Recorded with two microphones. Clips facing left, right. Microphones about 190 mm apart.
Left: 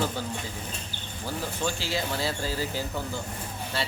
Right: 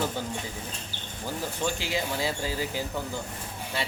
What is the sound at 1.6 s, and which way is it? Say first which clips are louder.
Speech: right 1 dB; 15° right (ahead or behind).